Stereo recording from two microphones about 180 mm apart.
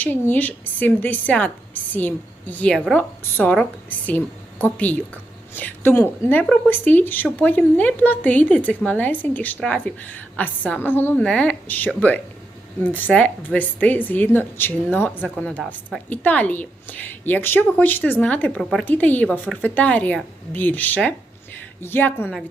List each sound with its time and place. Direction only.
0.0 s a woman's voice: 10° left (ahead or behind)